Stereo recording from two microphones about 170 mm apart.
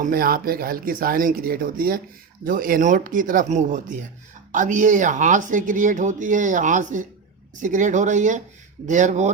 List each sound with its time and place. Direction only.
0.0 s speech: 60° right (ahead or behind)